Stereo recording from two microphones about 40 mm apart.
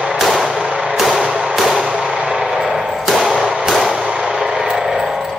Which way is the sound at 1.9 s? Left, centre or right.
Right.